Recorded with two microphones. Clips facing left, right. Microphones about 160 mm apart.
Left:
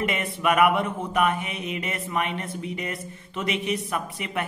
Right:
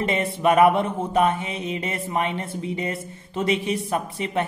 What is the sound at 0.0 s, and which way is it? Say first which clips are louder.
A man's voice: right 4 dB; 30° right (ahead or behind).